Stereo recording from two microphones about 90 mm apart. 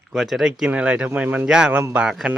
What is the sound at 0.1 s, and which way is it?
Speech, centre (ahead or behind).